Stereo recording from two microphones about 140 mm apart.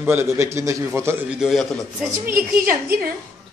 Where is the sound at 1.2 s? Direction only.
5° right (ahead or behind).